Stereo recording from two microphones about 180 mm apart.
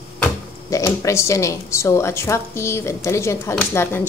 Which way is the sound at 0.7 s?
15° left (ahead or behind).